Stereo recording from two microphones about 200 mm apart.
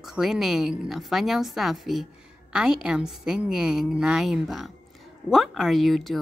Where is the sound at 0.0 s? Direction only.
Centre (ahead or behind).